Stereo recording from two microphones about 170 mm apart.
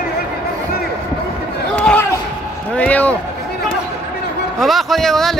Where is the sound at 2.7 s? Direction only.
10° left (ahead or behind).